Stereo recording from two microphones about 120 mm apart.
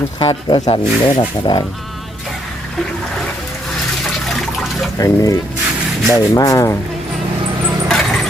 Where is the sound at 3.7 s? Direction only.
5° left (ahead or behind).